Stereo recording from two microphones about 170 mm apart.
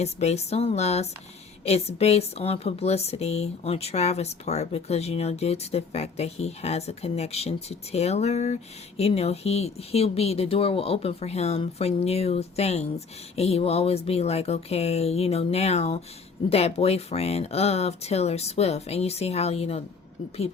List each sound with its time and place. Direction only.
0.0 s speech: 40° left (ahead or behind)